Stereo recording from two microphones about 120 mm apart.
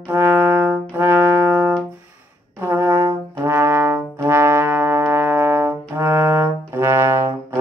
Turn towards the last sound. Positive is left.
turn(degrees=-20)  # may be behind; listen again after turning